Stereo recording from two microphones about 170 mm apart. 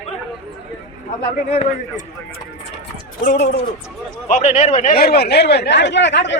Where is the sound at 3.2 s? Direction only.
80° left.